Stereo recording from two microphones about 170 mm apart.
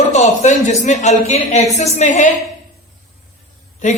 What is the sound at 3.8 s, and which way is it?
Speech, 45° left (ahead or behind).